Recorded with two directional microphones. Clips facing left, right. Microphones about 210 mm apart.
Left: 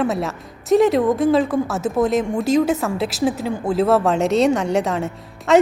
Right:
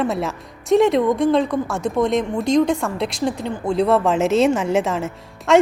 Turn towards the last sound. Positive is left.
turn(degrees=0)  # may be behind; listen again after turning